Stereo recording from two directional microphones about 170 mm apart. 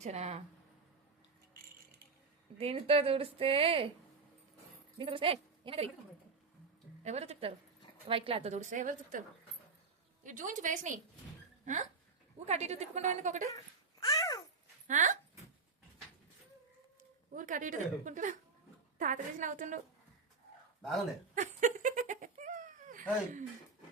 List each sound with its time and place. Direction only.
0.0 s a woman's voice: 40° right (ahead or behind)
2.6 s a woman's voice: 35° right (ahead or behind)
4.9 s a woman's voice: 30° right (ahead or behind)
7.0 s a woman's voice: 40° right (ahead or behind)
10.2 s a woman's voice: 50° right (ahead or behind)
14.0 s babbling: 20° left (ahead or behind)
14.8 s a woman's voice: 45° right (ahead or behind)
17.3 s a woman's voice: 50° right (ahead or behind)
21.3 s giggle: 45° right (ahead or behind)